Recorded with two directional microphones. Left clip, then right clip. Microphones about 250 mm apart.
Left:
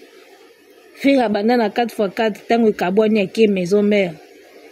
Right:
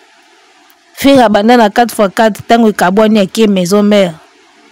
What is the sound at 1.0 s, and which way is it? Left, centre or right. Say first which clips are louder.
Speech: right 10 dB; right.